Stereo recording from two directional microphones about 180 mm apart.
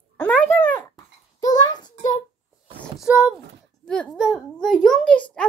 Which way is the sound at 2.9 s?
5° right (ahead or behind).